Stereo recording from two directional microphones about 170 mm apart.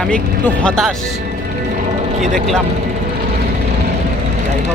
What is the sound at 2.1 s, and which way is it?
Speech, 45° right (ahead or behind).